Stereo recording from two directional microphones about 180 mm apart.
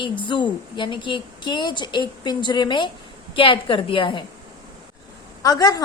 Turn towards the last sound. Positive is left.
turn(degrees=20)  # may be behind; listen again after turning